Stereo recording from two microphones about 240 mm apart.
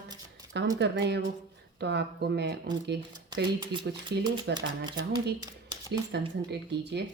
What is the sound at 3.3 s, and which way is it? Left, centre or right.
Speech, centre.